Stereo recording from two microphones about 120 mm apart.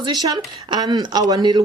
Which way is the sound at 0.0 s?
35° right (ahead or behind).